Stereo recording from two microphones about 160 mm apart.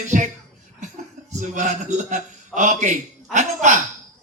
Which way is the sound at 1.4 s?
50° right (ahead or behind).